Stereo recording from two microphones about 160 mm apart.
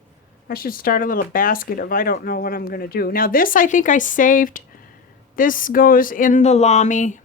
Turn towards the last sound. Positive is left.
turn(degrees=50)  # may be behind; listen again after turning